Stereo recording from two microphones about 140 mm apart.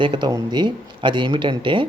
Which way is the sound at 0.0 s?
35° right (ahead or behind).